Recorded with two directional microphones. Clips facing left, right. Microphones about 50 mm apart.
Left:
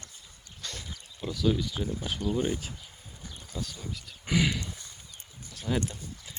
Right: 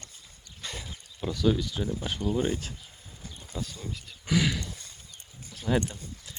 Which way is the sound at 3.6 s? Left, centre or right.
Centre.